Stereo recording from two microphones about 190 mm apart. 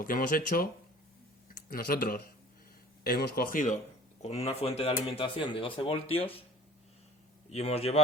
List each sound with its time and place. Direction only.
0.0 s speech: 50° left (ahead or behind)
1.7 s speech: 50° left (ahead or behind)
4.2 s speech: 35° left (ahead or behind)
7.5 s a man's voice: 35° left (ahead or behind)